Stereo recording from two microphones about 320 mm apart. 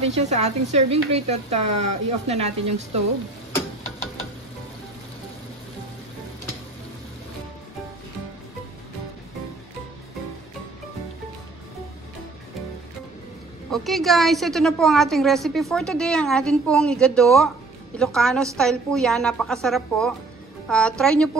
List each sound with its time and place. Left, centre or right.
0.0 s speech: right
13.7 s a woman's voice: centre